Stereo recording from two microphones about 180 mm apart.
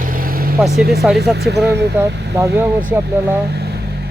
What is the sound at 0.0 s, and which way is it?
Vehicle, 50° right (ahead or behind).